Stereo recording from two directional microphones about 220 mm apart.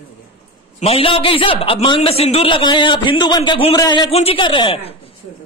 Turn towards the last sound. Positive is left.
turn(degrees=25)  # may be behind; listen again after turning